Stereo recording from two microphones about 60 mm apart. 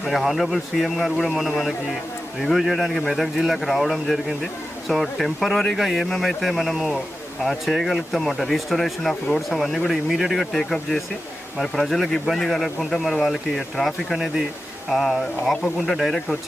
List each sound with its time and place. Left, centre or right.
0.0 s speech: centre